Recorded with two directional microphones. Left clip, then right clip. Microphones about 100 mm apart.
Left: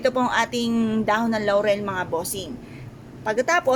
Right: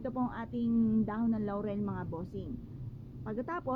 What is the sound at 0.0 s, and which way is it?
A woman's voice, 15° right (ahead or behind).